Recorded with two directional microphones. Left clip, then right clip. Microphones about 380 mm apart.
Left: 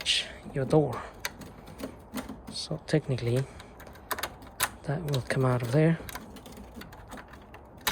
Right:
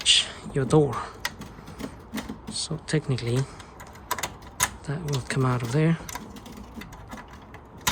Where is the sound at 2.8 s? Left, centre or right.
Centre.